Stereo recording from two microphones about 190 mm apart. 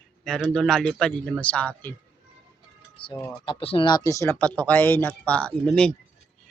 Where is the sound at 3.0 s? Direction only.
25° left (ahead or behind); by 5.9 s 5° left (ahead or behind).